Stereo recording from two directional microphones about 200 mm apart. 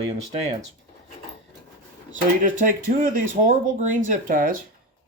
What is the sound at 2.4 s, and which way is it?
Speech, 40° right (ahead or behind).